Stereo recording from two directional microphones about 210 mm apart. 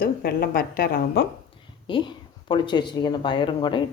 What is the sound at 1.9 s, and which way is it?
Speech, 20° left (ahead or behind).